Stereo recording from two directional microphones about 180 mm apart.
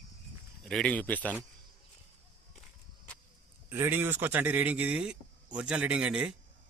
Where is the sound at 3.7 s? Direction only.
10° right (ahead or behind).